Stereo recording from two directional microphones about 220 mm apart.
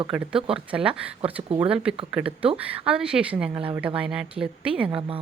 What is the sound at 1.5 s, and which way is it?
Speech, 25° right (ahead or behind).